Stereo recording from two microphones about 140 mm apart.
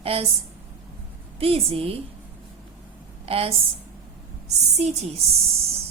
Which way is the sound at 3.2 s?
45° right (ahead or behind).